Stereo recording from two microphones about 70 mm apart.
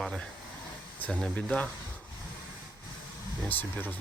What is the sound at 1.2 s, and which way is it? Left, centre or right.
Speech, centre.